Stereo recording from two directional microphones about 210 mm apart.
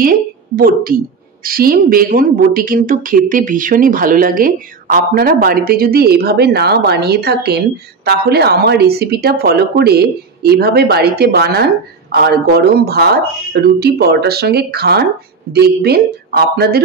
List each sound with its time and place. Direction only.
0.0 s a woman's voice: 40° right (ahead or behind)